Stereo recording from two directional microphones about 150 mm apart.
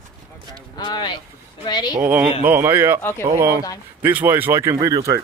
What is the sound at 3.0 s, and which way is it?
Speech, 15° left (ahead or behind).